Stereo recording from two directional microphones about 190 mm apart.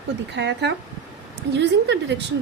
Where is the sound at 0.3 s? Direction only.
65° right (ahead or behind).